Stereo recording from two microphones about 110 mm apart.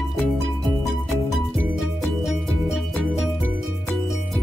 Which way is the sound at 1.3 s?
Centre (ahead or behind).